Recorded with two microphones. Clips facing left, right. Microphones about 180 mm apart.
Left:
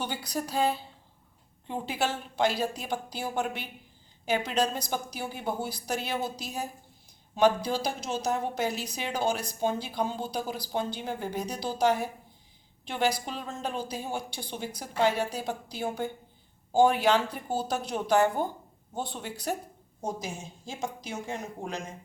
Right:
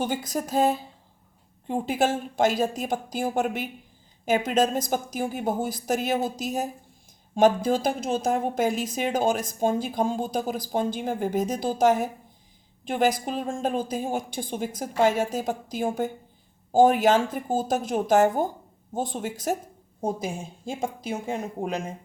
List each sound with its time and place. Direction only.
0.0 s a woman's voice: 45° right (ahead or behind)